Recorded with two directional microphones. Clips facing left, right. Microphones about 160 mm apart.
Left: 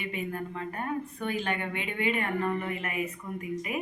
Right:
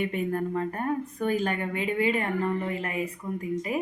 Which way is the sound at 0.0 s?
50° right (ahead or behind).